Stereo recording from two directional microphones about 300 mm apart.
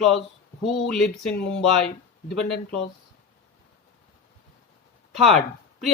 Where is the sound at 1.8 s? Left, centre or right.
Left.